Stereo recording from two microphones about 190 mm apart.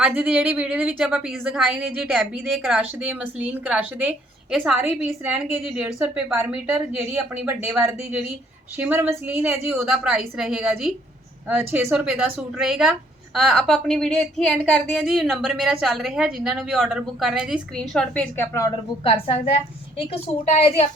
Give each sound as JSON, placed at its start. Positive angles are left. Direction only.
{"t": 0.0, "sound": "a woman's voice", "side_deg": -5}
{"t": 19.0, "sound": "a woman's voice", "side_deg": 30}